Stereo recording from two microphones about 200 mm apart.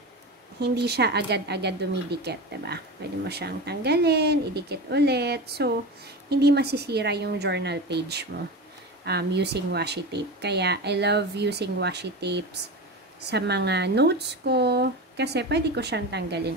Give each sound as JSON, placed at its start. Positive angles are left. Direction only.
{"t": 0.6, "sound": "speech", "side_deg": -55}